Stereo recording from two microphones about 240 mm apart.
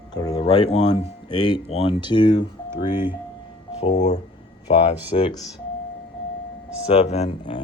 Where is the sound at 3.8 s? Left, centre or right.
Left.